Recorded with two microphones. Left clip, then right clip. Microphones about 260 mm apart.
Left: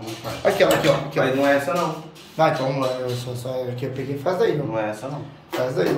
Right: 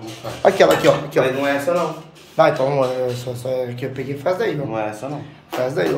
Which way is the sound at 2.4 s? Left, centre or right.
Centre.